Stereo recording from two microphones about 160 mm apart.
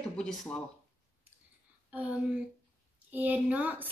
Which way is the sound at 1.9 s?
10° right (ahead or behind).